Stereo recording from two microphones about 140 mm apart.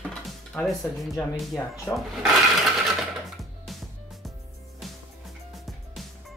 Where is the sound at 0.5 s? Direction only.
10° left (ahead or behind).